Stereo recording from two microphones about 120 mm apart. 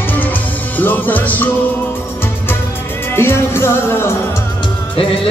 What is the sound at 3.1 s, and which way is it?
Music, 20° left (ahead or behind).